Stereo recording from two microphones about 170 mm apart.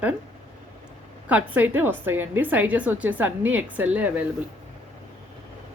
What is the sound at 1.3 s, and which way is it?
Speech, 10° right (ahead or behind).